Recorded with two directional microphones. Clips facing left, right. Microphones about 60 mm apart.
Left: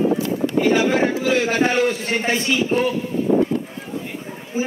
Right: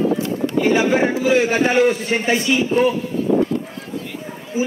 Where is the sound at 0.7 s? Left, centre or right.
Centre.